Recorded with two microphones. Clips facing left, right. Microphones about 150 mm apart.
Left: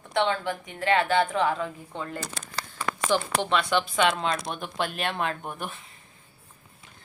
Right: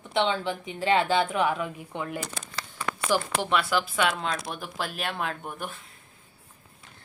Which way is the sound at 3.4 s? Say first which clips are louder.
Left 1 dB; 10° right (ahead or behind).